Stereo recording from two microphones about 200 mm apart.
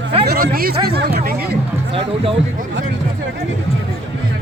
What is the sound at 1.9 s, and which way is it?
Speech, 30° right (ahead or behind).